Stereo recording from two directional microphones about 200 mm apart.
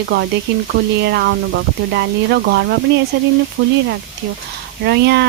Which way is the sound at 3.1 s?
55° right (ahead or behind).